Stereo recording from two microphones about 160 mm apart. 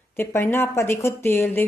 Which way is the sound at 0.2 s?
15° left (ahead or behind).